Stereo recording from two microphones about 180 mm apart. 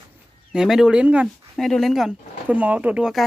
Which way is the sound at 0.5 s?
Centre (ahead or behind).